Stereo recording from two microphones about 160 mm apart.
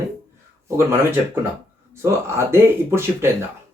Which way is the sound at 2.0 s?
15° right (ahead or behind).